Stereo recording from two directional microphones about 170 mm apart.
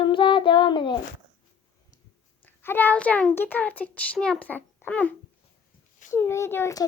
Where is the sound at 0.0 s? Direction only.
30° left (ahead or behind).